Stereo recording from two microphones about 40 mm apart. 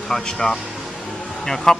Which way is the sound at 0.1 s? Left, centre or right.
Centre.